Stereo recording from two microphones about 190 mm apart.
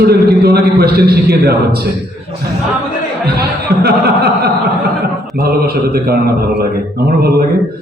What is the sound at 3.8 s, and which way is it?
A man's voice, 55° right (ahead or behind).